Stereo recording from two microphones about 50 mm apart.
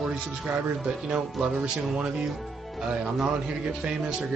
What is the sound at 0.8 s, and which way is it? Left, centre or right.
Speech, centre.